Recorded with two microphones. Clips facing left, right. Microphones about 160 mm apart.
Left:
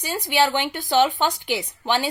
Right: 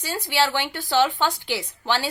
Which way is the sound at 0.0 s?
15° left (ahead or behind).